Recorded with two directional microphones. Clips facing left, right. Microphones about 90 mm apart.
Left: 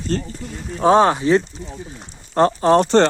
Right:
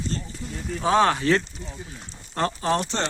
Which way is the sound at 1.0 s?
20° left (ahead or behind).